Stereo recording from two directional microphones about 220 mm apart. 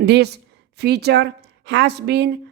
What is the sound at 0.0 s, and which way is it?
A woman's voice, 50° right (ahead or behind).